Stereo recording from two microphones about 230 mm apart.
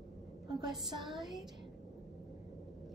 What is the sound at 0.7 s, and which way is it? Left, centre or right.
Speech, centre.